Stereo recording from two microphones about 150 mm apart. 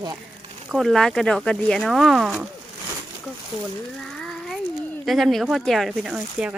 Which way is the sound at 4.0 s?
5° left (ahead or behind).